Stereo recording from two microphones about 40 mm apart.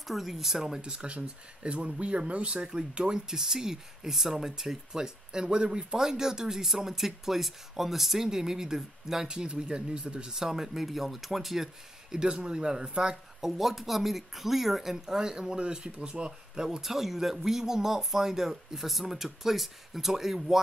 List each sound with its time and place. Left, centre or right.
0.0 s speech: centre
12.3 s speech: right
13.4 s speech: centre